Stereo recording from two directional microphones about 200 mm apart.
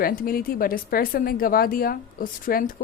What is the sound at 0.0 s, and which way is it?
A woman's voice, 45° left (ahead or behind).